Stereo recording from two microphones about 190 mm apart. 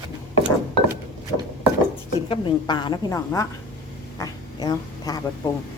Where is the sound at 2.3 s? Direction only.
25° left (ahead or behind).